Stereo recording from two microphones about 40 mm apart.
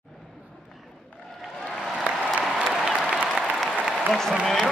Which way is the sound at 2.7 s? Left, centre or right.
Centre.